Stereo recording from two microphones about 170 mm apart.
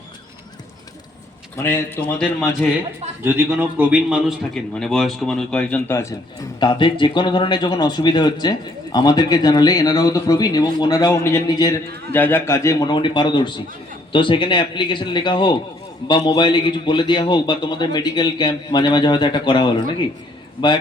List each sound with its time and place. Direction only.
1.5 s a man's voice: 15° left (ahead or behind)
3.3 s a man's voice: 10° right (ahead or behind); by 6.1 s 15° left (ahead or behind)
6.6 s speech: 25° left (ahead or behind)
12.1 s speech: 10° left (ahead or behind); by 20.1 s 30° left (ahead or behind)